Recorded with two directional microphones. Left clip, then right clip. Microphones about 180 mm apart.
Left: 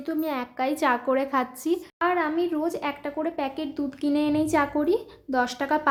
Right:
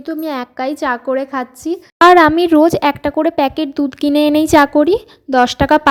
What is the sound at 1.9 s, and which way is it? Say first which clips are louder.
Speech: right 19 dB; 65° right (ahead or behind).